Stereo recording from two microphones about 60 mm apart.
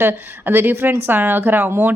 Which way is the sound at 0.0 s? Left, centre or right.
Right.